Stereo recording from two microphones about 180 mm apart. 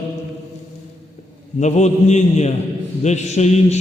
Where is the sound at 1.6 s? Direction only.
40° left (ahead or behind).